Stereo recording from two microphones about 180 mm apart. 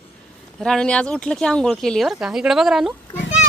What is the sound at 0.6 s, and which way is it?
Speech, 5° left (ahead or behind).